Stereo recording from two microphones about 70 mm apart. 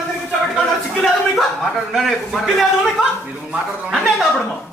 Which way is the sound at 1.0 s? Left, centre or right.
Centre.